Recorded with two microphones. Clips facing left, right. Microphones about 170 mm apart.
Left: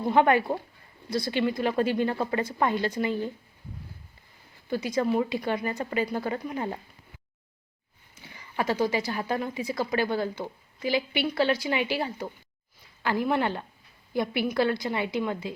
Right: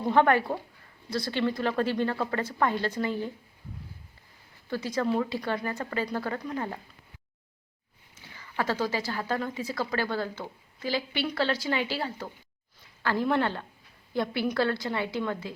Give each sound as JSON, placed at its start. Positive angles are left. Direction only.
{"t": 0.1, "sound": "a woman's voice", "side_deg": 15}
{"t": 4.7, "sound": "a woman's voice", "side_deg": 15}
{"t": 8.1, "sound": "a woman's voice", "side_deg": 15}